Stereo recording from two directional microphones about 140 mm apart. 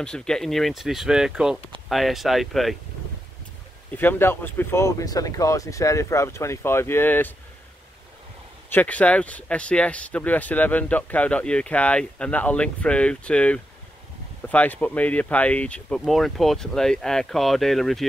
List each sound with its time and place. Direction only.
0.0 s speech: 5° left (ahead or behind)
3.9 s speech: 15° left (ahead or behind)
8.6 s speech: 10° left (ahead or behind)